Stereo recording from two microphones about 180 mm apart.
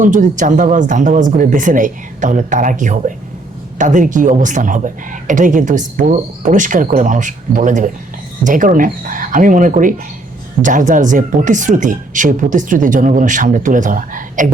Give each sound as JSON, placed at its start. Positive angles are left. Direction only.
{"t": 0.0, "sound": "speech", "side_deg": -45}